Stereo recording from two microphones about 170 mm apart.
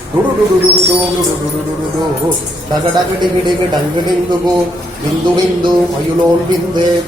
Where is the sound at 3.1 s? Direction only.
25° right (ahead or behind).